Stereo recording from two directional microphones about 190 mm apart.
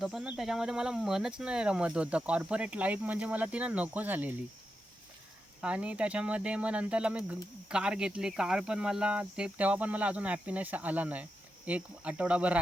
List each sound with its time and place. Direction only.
0.0 s speech: 5° right (ahead or behind)
5.6 s speech: 5° right (ahead or behind)